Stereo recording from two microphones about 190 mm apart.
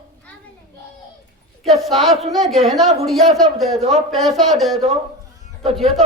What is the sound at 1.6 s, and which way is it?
Speech, centre (ahead or behind).